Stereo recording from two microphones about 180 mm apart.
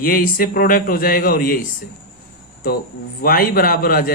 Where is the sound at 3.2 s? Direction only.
55° left (ahead or behind).